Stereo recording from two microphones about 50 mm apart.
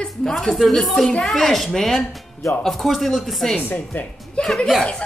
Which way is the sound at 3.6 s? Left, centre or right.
Left.